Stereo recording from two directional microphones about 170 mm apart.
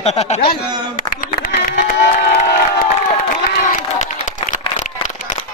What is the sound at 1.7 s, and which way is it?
Crowd, 70° left (ahead or behind).